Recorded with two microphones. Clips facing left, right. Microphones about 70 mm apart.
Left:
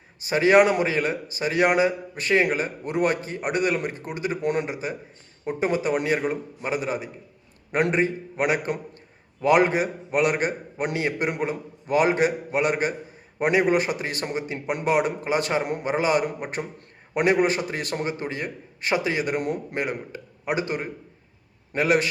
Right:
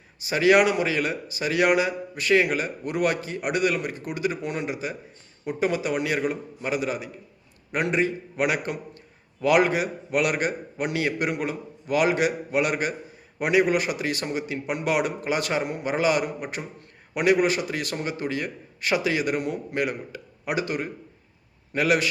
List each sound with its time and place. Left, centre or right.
0.3 s a man's voice: left
4.4 s a man's voice: left
4.6 s a man's voice: left